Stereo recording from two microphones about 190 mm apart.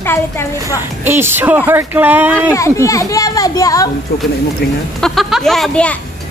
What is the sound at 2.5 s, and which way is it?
A child's voice, 15° left (ahead or behind).